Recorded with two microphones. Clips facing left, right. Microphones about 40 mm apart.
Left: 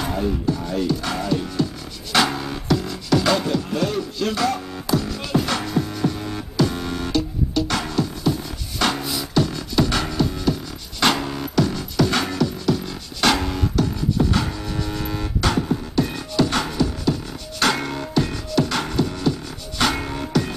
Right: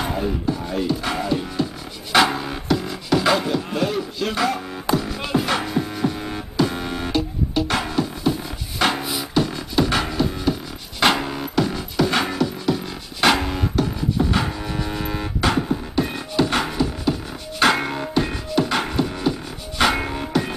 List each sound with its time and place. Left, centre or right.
0.0 s music: centre
2.1 s beatboxing: centre
4.9 s music: centre